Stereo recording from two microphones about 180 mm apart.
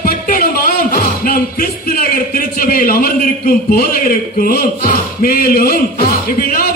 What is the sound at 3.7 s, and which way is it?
A man's voice, 55° left (ahead or behind).